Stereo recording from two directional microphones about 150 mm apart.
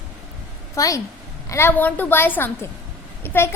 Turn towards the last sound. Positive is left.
turn(degrees=15)  # may be behind; listen again after turning